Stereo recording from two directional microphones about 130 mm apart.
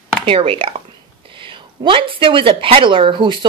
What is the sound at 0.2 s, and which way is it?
A woman's voice, 45° right (ahead or behind).